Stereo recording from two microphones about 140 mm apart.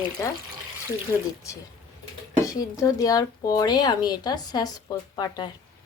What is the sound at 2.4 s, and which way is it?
Speech, 25° left (ahead or behind).